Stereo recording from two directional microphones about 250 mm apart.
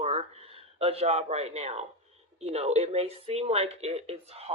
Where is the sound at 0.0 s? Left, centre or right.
Right.